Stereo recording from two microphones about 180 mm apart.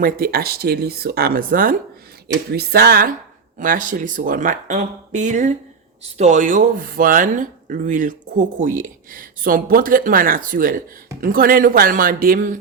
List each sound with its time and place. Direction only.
0.0 s speech: 55° right (ahead or behind)
2.2 s speech: 60° right (ahead or behind)
3.6 s speech: 50° right (ahead or behind)